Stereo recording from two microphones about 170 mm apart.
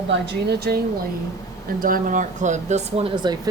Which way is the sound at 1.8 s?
55° right (ahead or behind).